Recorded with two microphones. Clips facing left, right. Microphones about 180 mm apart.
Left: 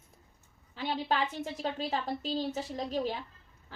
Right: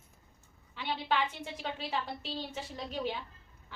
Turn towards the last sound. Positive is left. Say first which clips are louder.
# left 4 dB
turn(degrees=40)  # may be behind; listen again after turning